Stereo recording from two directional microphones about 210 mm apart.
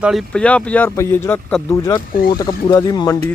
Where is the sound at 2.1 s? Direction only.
45° left (ahead or behind).